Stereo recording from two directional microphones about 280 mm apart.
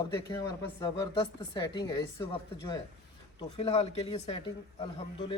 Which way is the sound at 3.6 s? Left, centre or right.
Centre.